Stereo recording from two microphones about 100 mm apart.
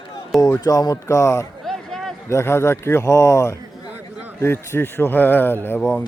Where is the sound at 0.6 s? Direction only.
35° left (ahead or behind).